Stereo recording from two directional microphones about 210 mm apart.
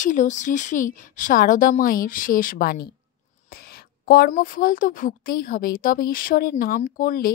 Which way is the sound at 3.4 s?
45° left (ahead or behind).